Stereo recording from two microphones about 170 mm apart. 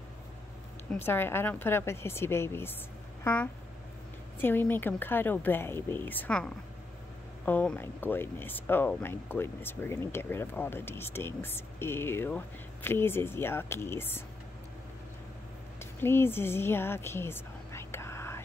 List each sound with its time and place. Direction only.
0.9 s speech: 15° left (ahead or behind)
4.4 s speech: 10° left (ahead or behind)
15.8 s a sound: 15° left (ahead or behind)